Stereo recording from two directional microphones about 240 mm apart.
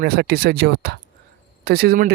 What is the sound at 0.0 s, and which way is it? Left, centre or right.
Speech, right.